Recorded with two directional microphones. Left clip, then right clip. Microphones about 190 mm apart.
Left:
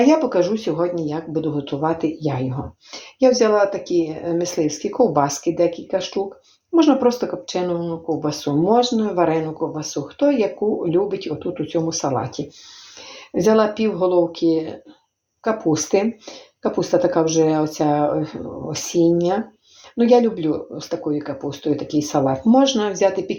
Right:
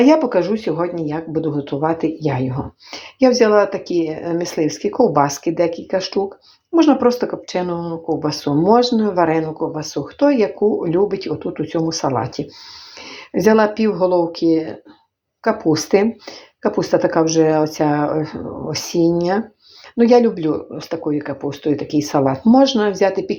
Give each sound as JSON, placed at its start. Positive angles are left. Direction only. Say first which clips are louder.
{"t": 0.0, "sound": "speech", "louder": "right 2 dB", "side_deg": -30}